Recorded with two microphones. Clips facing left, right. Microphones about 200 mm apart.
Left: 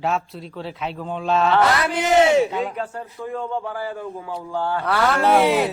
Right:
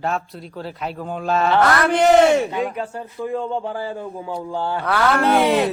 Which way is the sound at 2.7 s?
15° right (ahead or behind).